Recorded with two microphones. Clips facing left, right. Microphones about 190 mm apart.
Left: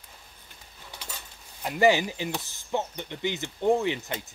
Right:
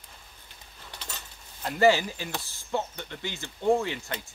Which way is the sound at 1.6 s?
15° left (ahead or behind).